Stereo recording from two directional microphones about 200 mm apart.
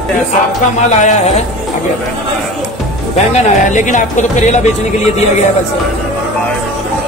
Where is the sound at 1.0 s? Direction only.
30° left (ahead or behind).